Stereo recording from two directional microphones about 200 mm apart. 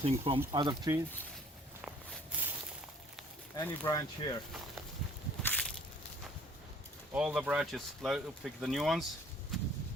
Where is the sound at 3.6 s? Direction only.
15° left (ahead or behind).